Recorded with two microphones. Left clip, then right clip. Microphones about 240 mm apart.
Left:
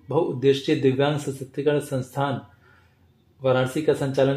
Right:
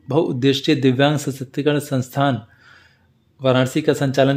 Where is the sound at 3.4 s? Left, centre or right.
Right.